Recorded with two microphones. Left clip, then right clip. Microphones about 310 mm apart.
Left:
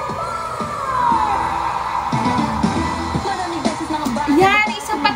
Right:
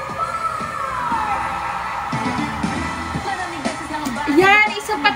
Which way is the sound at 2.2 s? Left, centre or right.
Left.